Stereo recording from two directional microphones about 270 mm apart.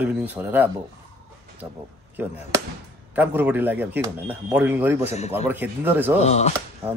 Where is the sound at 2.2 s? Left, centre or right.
Centre.